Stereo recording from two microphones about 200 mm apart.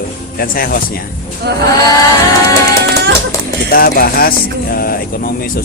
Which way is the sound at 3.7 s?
50° left (ahead or behind).